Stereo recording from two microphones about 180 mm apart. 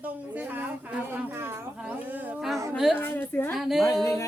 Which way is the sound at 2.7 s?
Centre (ahead or behind).